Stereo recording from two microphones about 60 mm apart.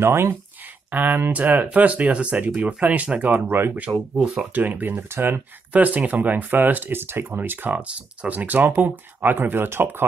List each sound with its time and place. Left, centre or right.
0.0 s speech: right
0.9 s speech: right
3.9 s speech: right
4.6 s speech: right